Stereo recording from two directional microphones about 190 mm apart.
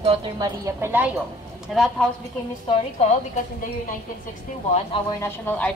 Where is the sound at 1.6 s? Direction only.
Centre (ahead or behind).